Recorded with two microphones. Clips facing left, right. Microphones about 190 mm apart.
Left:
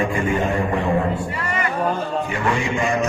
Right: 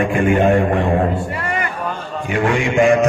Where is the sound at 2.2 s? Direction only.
65° right (ahead or behind).